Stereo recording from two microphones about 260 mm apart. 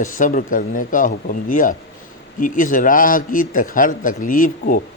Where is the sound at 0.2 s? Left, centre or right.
Left.